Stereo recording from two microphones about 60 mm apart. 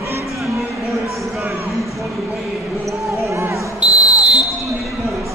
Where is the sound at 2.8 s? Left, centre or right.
Right.